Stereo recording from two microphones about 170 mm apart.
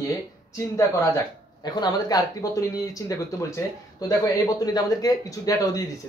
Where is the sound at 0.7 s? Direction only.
20° left (ahead or behind).